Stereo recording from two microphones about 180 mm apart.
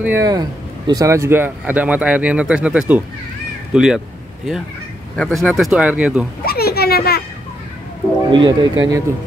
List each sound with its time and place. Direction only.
0.0 s speech: 15° right (ahead or behind)
5.1 s speech: 5° left (ahead or behind)
6.4 s a sound: 60° left (ahead or behind)
8.3 s speech: 25° right (ahead or behind)